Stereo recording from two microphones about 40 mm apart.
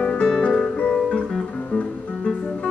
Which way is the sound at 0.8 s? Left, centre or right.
Centre.